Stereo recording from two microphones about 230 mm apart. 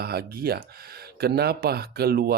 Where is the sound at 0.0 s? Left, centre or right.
Right.